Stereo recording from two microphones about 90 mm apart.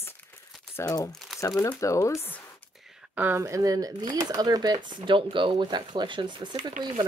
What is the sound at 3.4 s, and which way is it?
Speech, 40° right (ahead or behind).